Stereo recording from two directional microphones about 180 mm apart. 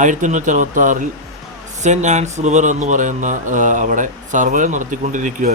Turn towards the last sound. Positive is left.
turn(degrees=-45)  # may be behind; listen again after turning